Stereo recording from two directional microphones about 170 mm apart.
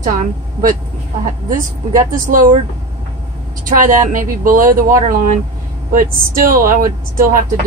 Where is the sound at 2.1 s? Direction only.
50° right (ahead or behind).